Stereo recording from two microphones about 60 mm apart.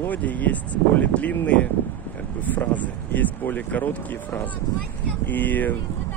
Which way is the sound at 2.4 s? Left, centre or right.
Left.